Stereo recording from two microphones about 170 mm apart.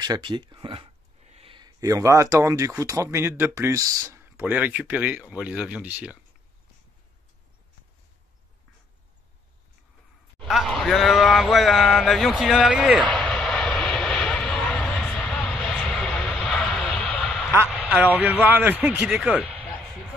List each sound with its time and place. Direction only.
0.0 s speech: 25° right (ahead or behind); by 6.1 s 10° right (ahead or behind)
10.4 s speech: centre (ahead or behind)
13.0 s vehicle: 5° left (ahead or behind)
17.6 s a man's voice: 5° right (ahead or behind)
19.6 s a sound: 5° left (ahead or behind)